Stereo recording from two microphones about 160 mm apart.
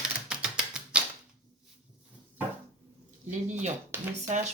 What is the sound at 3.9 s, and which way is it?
Speech, 10° right (ahead or behind).